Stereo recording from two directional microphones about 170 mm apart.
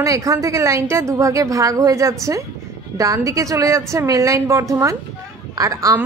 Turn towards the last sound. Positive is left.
turn(degrees=-20)  # may be behind; listen again after turning